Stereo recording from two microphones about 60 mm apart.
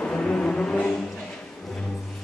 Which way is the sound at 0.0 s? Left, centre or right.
Centre.